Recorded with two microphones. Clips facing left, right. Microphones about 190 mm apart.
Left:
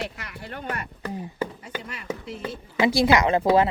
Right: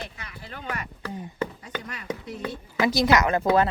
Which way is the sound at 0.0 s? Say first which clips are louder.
Left 5 dB; 70° left (ahead or behind).